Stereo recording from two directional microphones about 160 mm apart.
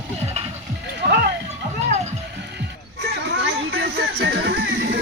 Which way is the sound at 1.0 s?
90° right.